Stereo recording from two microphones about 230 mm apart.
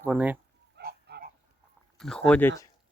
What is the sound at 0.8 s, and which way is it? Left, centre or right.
Pig, right.